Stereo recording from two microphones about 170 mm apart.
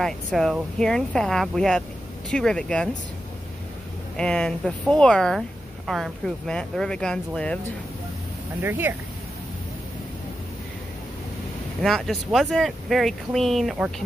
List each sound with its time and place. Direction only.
0.0 s speech: centre (ahead or behind)
4.2 s speech: 5° left (ahead or behind)
8.6 s speech: 10° right (ahead or behind)
11.8 s speech: centre (ahead or behind)